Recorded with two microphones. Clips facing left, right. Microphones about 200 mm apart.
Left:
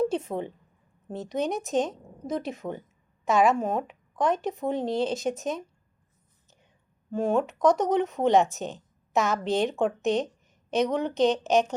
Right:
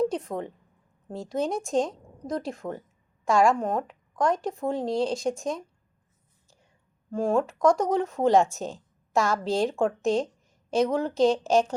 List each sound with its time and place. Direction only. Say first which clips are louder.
1.0 s a woman's voice: even; centre (ahead or behind)
7.1 s a woman's voice: even; centre (ahead or behind)